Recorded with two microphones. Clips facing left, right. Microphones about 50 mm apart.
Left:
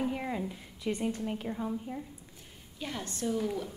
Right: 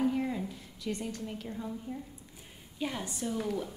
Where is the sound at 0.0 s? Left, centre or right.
Left.